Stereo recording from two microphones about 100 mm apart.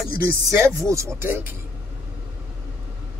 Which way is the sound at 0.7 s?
30° right (ahead or behind).